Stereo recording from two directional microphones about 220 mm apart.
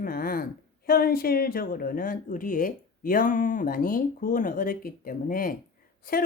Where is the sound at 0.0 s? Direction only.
40° left (ahead or behind).